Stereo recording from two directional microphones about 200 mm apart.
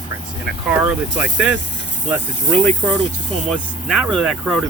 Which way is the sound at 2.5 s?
5° left (ahead or behind).